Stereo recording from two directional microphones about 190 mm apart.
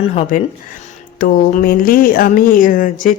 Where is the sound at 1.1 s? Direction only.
45° left (ahead or behind).